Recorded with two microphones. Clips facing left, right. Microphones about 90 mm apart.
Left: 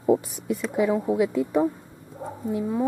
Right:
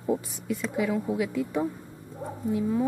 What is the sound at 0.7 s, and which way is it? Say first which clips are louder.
Speech: left 6 dB; 25° left (ahead or behind).